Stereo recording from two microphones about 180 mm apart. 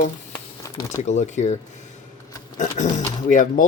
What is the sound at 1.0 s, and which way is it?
Speech, 40° left (ahead or behind).